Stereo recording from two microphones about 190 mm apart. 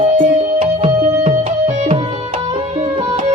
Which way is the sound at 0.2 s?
35° right (ahead or behind).